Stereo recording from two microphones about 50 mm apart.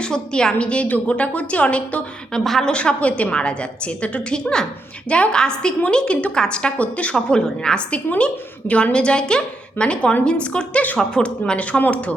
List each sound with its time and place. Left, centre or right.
0.0 s a woman's voice: centre
2.3 s a woman's voice: centre; by 12.1 s left